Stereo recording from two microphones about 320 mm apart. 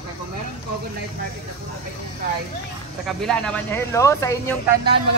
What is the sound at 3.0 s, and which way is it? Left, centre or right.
Speech, centre.